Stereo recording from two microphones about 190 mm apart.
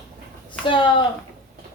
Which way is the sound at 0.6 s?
25° left (ahead or behind).